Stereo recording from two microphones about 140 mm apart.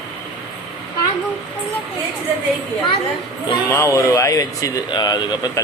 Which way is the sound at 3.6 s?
20° left (ahead or behind).